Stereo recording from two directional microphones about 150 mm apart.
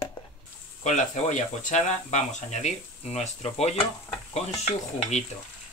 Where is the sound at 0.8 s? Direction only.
55° left (ahead or behind).